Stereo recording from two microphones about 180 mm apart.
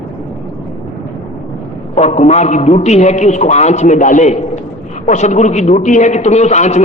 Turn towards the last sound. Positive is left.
turn(degrees=40)  # may be behind; listen again after turning